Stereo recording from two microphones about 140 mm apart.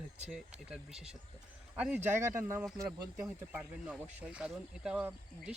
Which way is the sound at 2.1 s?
20° right (ahead or behind).